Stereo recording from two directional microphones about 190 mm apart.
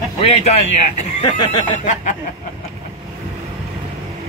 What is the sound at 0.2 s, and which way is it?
Speech, 35° left (ahead or behind).